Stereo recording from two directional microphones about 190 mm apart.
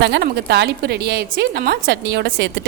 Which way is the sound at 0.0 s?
60° right (ahead or behind).